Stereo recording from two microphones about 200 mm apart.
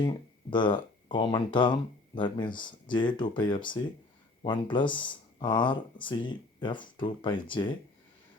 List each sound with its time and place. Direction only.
0.0 s speech: 20° left (ahead or behind)